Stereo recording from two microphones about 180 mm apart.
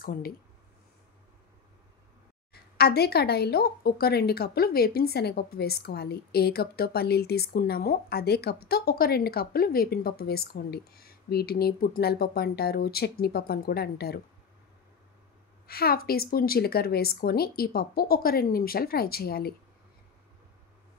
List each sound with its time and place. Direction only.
0.0 s speech: 55° left (ahead or behind)
2.5 s speech: 60° left (ahead or behind)
15.6 s speech: 60° left (ahead or behind)